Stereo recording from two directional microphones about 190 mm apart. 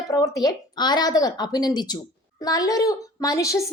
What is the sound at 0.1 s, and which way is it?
A woman's voice, 20° left (ahead or behind).